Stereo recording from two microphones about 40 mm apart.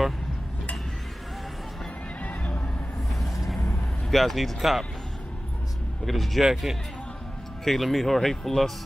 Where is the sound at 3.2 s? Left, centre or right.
Centre.